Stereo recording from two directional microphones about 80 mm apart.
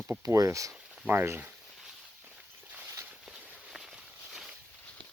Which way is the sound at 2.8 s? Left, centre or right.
Right.